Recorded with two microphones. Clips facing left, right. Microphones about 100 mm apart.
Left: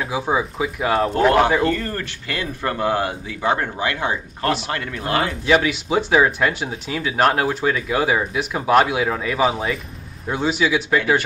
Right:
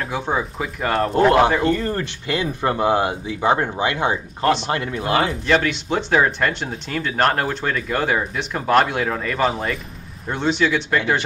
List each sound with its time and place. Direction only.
0.0 s speech: 5° left (ahead or behind)
1.6 s speech: 20° right (ahead or behind)
5.5 s speech: 5° left (ahead or behind)